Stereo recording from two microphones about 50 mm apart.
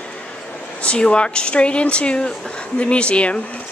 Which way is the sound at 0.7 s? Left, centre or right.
Left.